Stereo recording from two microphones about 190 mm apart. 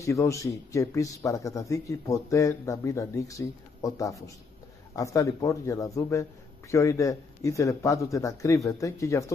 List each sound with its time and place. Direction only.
0.0 s speech: 15° left (ahead or behind)